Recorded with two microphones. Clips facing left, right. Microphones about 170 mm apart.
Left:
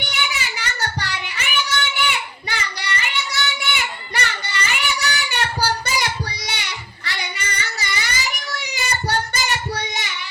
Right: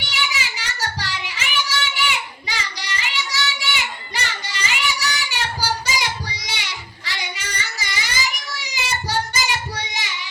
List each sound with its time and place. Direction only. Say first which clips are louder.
0.0 s child singing: left 1 dB; 60° left (ahead or behind)